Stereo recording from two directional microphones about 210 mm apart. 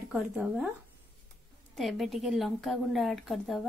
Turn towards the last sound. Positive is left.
turn(degrees=0)  # may be behind; listen again after turning